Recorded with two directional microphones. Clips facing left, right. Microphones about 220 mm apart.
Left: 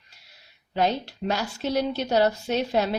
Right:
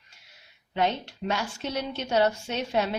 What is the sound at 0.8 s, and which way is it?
A woman's voice, 35° left (ahead or behind).